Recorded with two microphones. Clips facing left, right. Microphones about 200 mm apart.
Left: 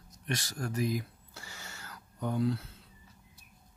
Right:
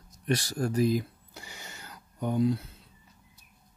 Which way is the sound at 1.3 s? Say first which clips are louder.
Right 3 dB; 15° right (ahead or behind).